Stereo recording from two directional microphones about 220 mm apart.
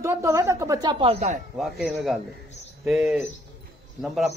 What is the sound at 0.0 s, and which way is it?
A woman's voice, 10° right (ahead or behind).